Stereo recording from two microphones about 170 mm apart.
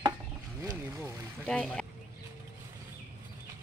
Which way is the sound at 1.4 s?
5° left (ahead or behind).